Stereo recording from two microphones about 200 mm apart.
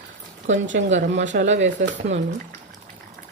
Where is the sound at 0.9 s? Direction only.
40° right (ahead or behind).